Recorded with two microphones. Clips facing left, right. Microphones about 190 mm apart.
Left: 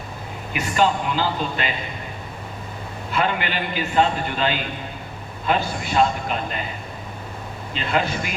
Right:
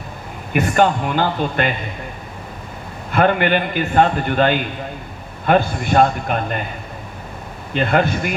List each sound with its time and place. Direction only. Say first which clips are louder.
0.5 s a man's voice: right 5 dB; 55° right (ahead or behind)
3.1 s a man's voice: right 8 dB; 55° right (ahead or behind)
7.7 s a man's voice: right 6 dB; 55° right (ahead or behind)